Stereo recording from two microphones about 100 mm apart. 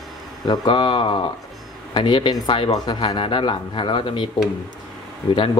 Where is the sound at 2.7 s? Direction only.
40° left (ahead or behind).